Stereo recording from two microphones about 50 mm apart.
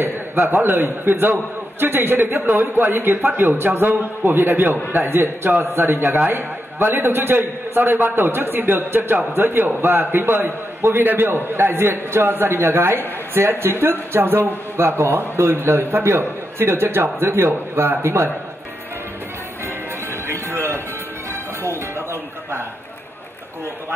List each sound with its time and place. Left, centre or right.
0.0 s a man's voice: right
20.2 s music: right